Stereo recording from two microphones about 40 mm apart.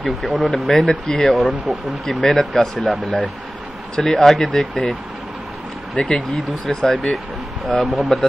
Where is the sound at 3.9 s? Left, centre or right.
Centre.